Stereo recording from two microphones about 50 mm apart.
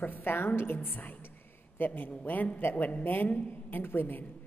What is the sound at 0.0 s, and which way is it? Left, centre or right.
A woman's voice, left.